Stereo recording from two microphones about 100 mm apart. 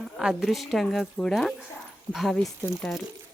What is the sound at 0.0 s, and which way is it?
Speech, 5° right (ahead or behind).